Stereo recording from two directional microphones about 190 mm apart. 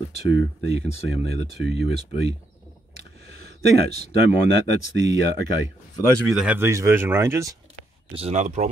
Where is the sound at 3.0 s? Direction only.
60° right (ahead or behind).